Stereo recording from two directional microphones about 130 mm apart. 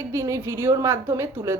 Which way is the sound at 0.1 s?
25° right (ahead or behind).